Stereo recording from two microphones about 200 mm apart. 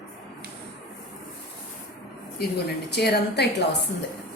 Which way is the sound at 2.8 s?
55° left (ahead or behind).